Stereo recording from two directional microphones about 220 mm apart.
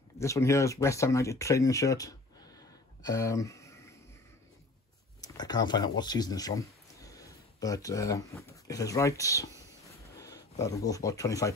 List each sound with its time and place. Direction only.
0.2 s speech: 15° left (ahead or behind)
5.2 s speech: 20° left (ahead or behind)
9.8 s a sound: 15° left (ahead or behind)
10.6 s speech: 15° left (ahead or behind)